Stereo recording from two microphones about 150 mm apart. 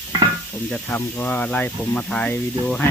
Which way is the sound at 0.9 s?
15° left (ahead or behind).